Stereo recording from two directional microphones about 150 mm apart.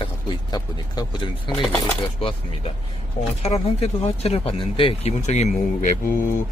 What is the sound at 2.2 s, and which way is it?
Speech, 40° left (ahead or behind).